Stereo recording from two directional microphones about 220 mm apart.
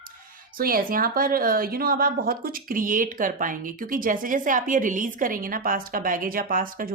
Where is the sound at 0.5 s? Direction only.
40° right (ahead or behind).